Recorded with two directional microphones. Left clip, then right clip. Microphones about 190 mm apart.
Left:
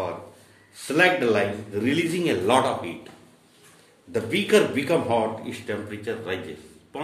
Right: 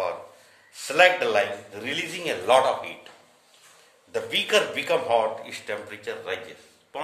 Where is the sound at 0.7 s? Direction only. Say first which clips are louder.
Right 1 dB; 25° right (ahead or behind).